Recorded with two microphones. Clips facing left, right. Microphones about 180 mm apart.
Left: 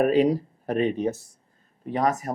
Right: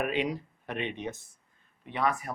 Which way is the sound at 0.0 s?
35° left (ahead or behind).